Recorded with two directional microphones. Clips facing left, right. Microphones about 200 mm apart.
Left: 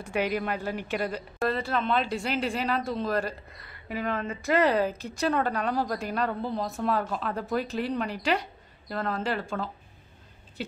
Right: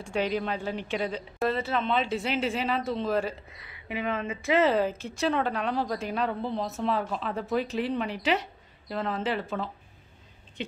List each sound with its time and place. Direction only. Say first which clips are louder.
0.0 s speech: even; 5° left (ahead or behind)